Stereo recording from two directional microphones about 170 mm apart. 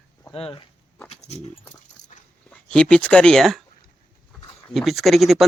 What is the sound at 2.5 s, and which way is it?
Speech, 5° left (ahead or behind).